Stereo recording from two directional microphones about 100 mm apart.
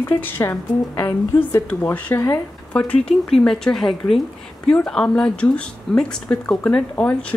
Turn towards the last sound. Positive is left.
turn(degrees=10)  # may be behind; listen again after turning